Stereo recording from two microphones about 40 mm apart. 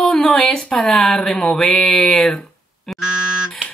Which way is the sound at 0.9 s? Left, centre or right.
Centre.